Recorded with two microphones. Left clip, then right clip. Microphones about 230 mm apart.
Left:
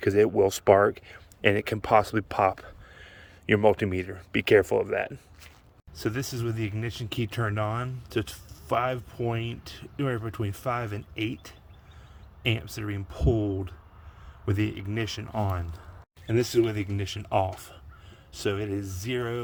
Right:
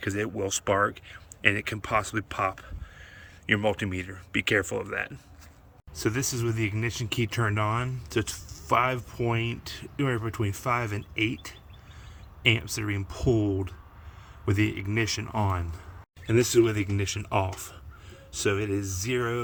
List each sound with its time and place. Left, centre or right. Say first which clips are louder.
0.0 s speech: left 9 dB; left
5.9 s speech: right 3 dB; centre